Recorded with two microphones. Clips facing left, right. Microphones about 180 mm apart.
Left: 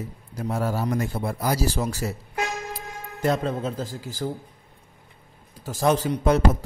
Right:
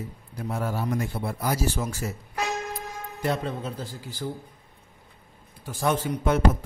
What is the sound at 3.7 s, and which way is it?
Speech, 45° left (ahead or behind).